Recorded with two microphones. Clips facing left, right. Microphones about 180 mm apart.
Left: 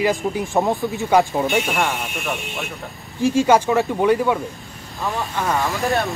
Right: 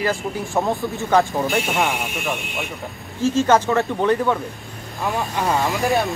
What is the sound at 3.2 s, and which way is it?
Speech, 10° left (ahead or behind).